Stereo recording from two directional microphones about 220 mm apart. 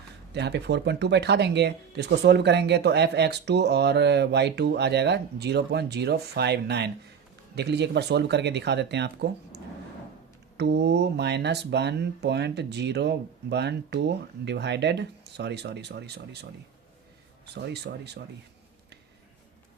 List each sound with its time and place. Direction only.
0.3 s speech: 50° right (ahead or behind)
10.6 s speech: 50° right (ahead or behind)